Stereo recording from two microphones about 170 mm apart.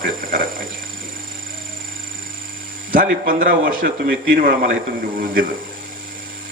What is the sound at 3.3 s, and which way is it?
Speech, 55° right (ahead or behind).